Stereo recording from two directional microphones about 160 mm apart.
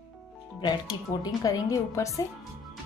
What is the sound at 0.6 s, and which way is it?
Speech, 25° left (ahead or behind).